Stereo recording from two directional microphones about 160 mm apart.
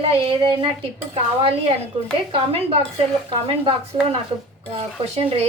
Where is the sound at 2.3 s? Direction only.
40° right (ahead or behind).